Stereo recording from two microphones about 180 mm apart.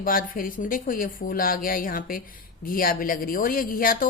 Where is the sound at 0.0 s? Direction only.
50° left (ahead or behind).